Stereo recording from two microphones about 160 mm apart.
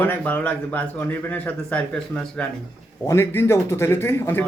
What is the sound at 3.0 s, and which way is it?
A man's voice, 15° left (ahead or behind).